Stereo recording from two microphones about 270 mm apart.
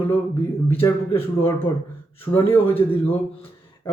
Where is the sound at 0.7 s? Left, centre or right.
Centre.